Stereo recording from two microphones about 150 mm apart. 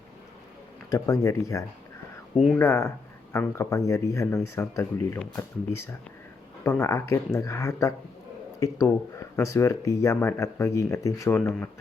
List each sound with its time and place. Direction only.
0.9 s speech: 20° left (ahead or behind)
2.3 s speech: centre (ahead or behind)
2.6 s speech: 20° left (ahead or behind)
6.7 s speech: 20° left (ahead or behind)